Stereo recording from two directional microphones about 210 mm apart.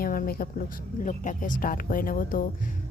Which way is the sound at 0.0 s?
45° left (ahead or behind).